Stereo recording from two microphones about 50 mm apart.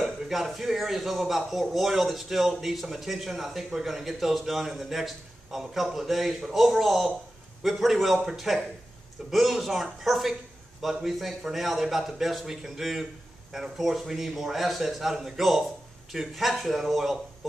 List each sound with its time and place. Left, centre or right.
0.0 s speech: centre